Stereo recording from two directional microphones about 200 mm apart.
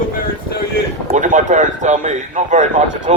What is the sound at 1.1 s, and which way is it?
Speech, 40° right (ahead or behind).